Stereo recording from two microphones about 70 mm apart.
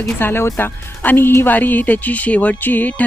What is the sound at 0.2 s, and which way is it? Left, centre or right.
Speech, left.